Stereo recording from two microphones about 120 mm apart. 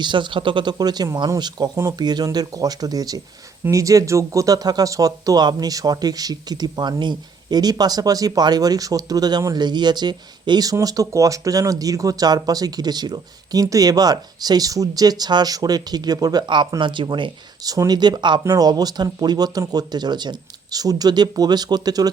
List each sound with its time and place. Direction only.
0.0 s speech: 40° right (ahead or behind)